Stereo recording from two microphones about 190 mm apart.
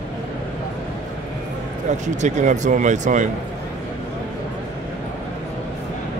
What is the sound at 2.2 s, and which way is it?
Speech, 40° right (ahead or behind).